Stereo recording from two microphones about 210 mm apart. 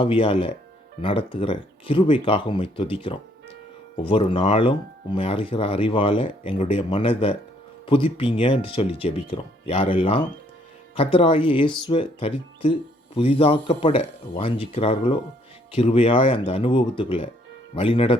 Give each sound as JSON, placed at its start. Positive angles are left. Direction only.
{"t": 0.0, "sound": "speech", "side_deg": 25}